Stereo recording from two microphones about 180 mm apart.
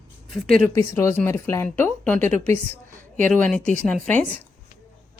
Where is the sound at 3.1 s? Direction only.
45° right (ahead or behind).